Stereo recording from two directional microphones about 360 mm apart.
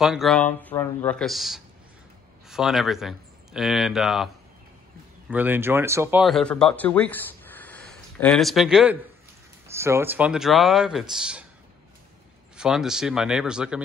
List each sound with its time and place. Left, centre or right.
0.0 s speech: centre
5.3 s speech: centre
12.5 s speech: centre